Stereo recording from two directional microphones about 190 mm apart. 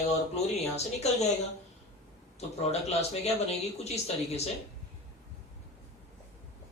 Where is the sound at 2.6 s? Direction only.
35° left (ahead or behind).